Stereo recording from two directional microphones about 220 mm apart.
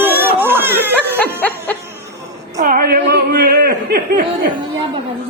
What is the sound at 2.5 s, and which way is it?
Speech, 40° right (ahead or behind).